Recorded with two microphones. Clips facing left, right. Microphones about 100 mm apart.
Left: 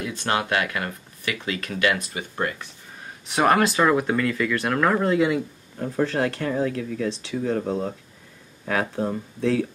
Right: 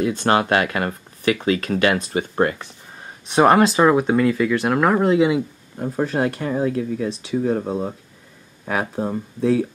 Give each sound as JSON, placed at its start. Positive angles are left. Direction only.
{"t": 0.0, "sound": "speech", "side_deg": -40}
{"t": 3.3, "sound": "speech", "side_deg": -25}